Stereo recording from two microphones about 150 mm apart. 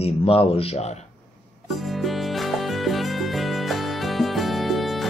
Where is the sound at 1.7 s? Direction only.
Centre (ahead or behind).